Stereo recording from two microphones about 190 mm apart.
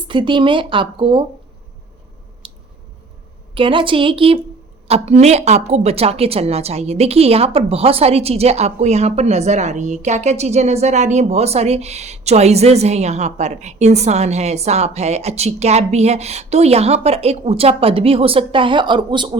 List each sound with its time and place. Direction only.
0.1 s speech: 25° right (ahead or behind)
2.4 s squish: 25° right (ahead or behind)
3.5 s a woman's voice: 25° right (ahead or behind)